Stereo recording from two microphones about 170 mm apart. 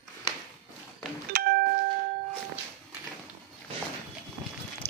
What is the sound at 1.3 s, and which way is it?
Doorbell, 60° right (ahead or behind).